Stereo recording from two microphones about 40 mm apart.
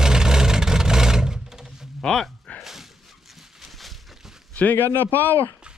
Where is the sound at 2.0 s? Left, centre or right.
Centre.